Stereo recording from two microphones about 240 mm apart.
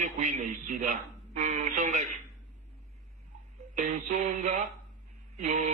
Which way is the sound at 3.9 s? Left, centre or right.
Right.